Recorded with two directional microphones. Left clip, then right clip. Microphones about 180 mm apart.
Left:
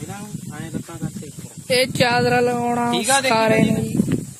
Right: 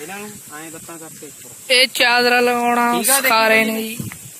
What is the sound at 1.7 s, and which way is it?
Speech, 10° left (ahead or behind).